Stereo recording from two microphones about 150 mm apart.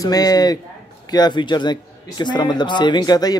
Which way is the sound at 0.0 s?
25° left (ahead or behind).